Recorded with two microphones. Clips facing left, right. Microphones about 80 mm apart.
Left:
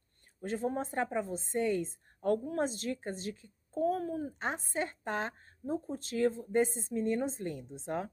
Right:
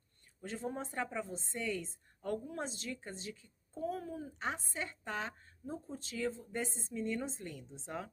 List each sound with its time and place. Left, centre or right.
0.4 s speech: left